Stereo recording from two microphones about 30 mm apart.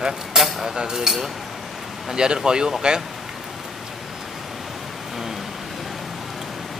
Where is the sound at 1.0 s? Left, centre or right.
Centre.